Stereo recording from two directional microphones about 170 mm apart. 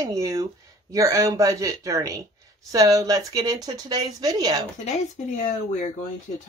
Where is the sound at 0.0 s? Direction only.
20° right (ahead or behind).